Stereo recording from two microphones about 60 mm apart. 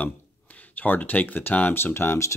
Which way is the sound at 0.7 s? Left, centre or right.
Left.